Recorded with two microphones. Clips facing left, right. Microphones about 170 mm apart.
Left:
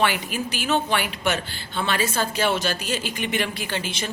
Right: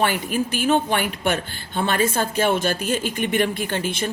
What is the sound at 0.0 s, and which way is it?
Speech, 45° right (ahead or behind).